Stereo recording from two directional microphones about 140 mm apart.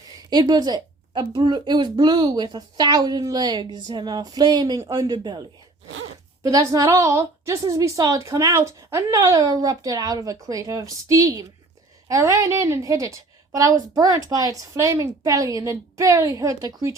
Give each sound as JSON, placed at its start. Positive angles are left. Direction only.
{"t": 0.2, "sound": "a woman's voice", "side_deg": -30}
{"t": 6.4, "sound": "a woman's voice", "side_deg": -25}